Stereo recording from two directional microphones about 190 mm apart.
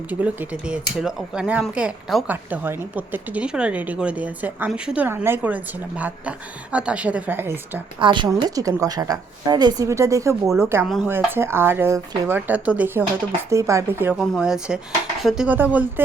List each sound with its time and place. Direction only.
0.1 s speech: 5° right (ahead or behind)
8.0 s a woman's voice: 25° right (ahead or behind)
10.8 s speech: centre (ahead or behind)
11.1 s speech: 10° right (ahead or behind)